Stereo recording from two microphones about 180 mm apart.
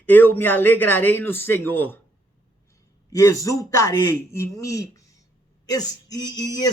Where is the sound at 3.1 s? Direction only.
15° left (ahead or behind).